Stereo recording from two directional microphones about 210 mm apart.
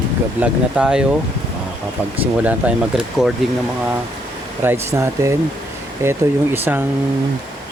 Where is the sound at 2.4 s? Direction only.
5° right (ahead or behind).